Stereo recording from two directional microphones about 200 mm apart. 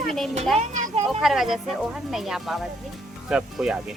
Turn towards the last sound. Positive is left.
turn(degrees=-5)  # may be behind; listen again after turning